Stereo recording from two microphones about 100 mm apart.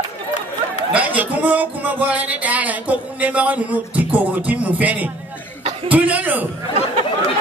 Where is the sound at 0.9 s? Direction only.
15° right (ahead or behind).